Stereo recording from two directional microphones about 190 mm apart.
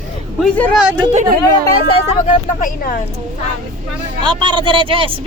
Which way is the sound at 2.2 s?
45° left (ahead or behind).